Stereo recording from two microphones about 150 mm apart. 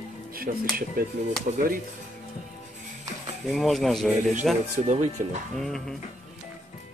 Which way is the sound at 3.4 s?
Centre (ahead or behind).